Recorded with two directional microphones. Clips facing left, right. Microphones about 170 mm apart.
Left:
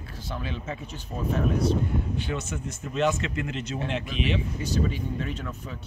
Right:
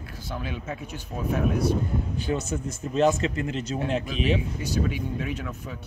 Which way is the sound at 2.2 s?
40° right (ahead or behind).